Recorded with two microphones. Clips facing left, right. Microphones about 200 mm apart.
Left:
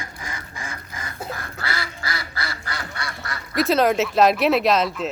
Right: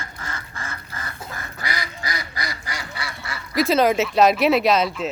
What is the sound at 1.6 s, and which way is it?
Duck, 15° right (ahead or behind).